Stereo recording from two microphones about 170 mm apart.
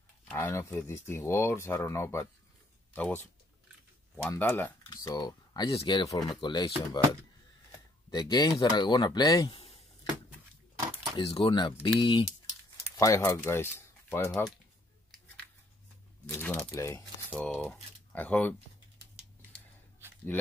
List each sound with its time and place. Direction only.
0.3 s speech: 10° left (ahead or behind)
8.1 s speech: 25° left (ahead or behind)
11.1 s speech: 30° left (ahead or behind); by 14.4 s 10° left (ahead or behind)
16.3 s speech: 15° left (ahead or behind)